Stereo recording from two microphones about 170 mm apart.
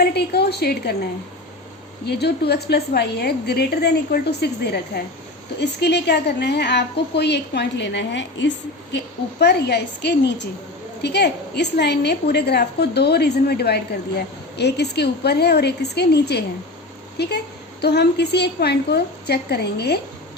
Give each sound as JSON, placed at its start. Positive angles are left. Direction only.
{"t": 0.0, "sound": "a woman's voice", "side_deg": 70}
{"t": 2.0, "sound": "a woman's voice", "side_deg": 75}
{"t": 5.5, "sound": "a woman's voice", "side_deg": 85}
{"t": 9.4, "sound": "a woman's voice", "side_deg": 80}